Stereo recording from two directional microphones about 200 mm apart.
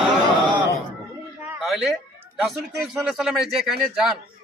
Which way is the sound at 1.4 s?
5° right (ahead or behind).